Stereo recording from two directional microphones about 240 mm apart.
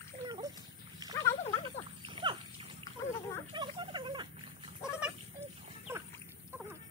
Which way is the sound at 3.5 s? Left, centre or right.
Centre.